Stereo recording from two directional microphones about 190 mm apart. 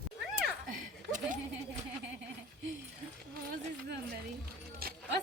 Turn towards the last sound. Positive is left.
turn(degrees=-55)  # may be behind; listen again after turning